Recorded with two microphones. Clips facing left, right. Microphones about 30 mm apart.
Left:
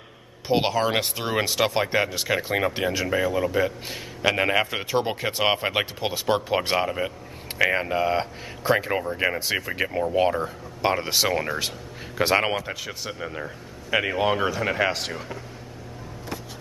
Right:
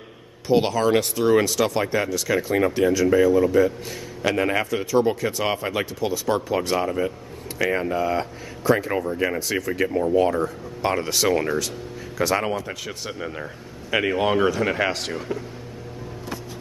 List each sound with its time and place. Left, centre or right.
0.5 s a man's voice: left
9.4 s a man's voice: left
9.7 s speech: centre
12.2 s a man's voice: left
12.8 s speech: centre